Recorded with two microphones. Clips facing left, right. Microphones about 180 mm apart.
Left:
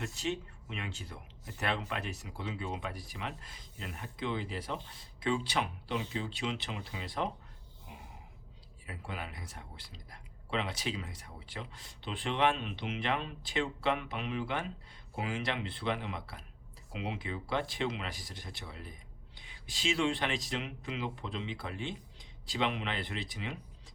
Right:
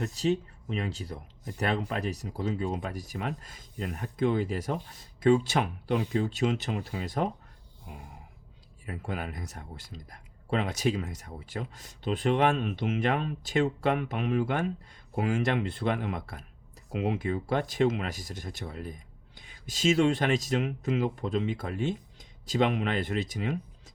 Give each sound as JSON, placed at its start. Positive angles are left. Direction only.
{"t": 0.0, "sound": "speech", "side_deg": -40}
{"t": 8.9, "sound": "speech", "side_deg": -45}